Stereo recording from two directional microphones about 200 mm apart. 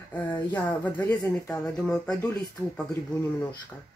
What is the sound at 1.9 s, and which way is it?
Speech, 5° left (ahead or behind).